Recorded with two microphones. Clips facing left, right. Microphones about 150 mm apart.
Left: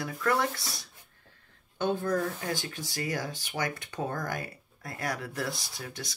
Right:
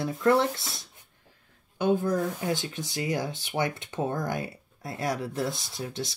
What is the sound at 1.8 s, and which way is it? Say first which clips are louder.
Speech: right 3 dB; 10° right (ahead or behind).